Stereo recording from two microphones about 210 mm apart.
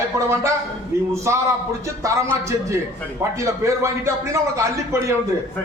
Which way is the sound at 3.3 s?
15° right (ahead or behind).